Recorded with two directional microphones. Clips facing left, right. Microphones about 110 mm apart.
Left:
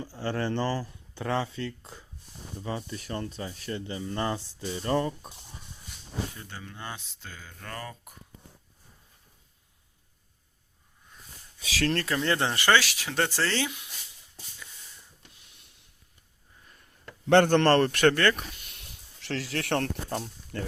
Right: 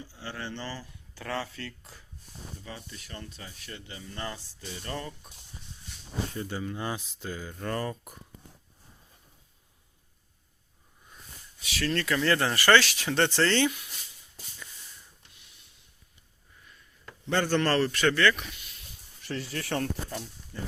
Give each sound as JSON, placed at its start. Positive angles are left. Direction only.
{"t": 0.0, "sound": "speech", "side_deg": 45}
{"t": 1.1, "sound": "speech", "side_deg": 25}
{"t": 2.6, "sound": "speech", "side_deg": 40}
{"t": 6.5, "sound": "speech", "side_deg": -10}
{"t": 7.6, "sound": "speech", "side_deg": -30}
{"t": 11.7, "sound": "speech", "side_deg": 75}
{"t": 12.0, "sound": "speech", "side_deg": 30}
{"t": 17.2, "sound": "speech", "side_deg": 65}
{"t": 18.7, "sound": "a sound", "side_deg": 75}